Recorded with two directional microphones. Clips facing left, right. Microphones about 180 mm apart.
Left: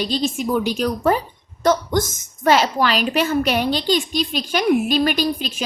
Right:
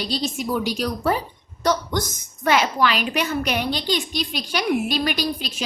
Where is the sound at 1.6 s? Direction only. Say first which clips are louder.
Left 4 dB; 50° left (ahead or behind).